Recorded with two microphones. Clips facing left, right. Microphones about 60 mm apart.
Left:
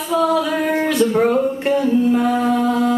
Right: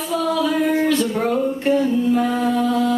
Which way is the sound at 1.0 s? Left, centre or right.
Left.